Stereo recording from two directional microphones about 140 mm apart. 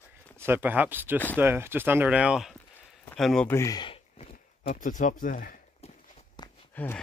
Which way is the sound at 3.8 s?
40° left (ahead or behind).